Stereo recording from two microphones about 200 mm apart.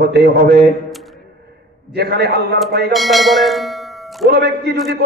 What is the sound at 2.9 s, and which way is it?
Bell, centre (ahead or behind).